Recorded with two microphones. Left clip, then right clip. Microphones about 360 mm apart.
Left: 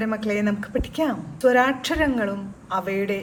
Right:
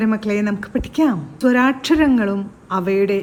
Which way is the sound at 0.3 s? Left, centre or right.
Right.